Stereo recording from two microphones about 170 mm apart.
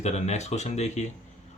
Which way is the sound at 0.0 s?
40° left (ahead or behind).